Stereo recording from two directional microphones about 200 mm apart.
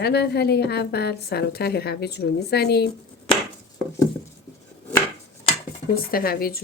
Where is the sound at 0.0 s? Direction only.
55° left (ahead or behind).